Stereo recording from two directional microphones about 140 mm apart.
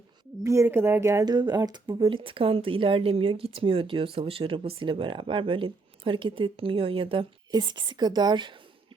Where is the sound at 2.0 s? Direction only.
40° right (ahead or behind).